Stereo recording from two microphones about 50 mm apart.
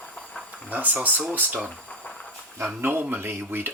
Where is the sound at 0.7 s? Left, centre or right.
Right.